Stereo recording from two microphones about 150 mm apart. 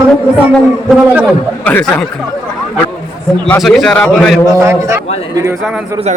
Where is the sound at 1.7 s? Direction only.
10° left (ahead or behind).